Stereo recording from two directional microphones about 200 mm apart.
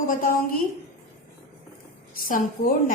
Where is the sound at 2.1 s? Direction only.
45° left (ahead or behind).